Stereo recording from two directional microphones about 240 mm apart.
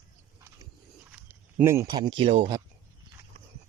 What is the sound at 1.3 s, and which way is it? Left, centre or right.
Speech, centre.